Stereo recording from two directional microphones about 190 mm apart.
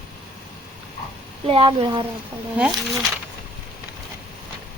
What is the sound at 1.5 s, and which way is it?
Speech, 30° right (ahead or behind).